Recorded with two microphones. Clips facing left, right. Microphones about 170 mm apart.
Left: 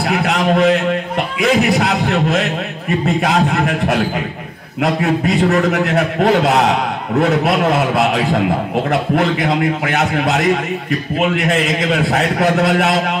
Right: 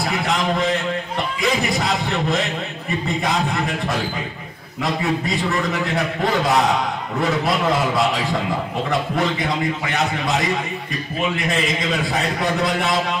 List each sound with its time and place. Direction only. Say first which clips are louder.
0.1 s a man's voice: left 8 dB; 65° left (ahead or behind)